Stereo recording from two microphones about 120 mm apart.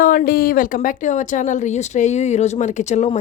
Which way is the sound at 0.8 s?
90° left.